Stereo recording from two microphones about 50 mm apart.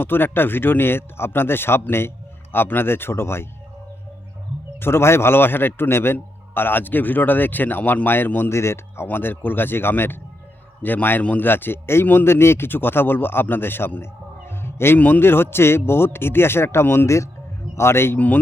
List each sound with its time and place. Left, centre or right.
0.0 s a man's voice: left
4.8 s a man's voice: left
8.5 s speech: left
9.0 s a man's voice: left
11.2 s a man's voice: left
11.4 s a man's voice: left
14.6 s music: left
14.9 s a man's voice: left